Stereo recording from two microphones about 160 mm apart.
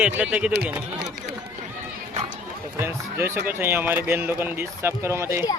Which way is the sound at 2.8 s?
15° right (ahead or behind).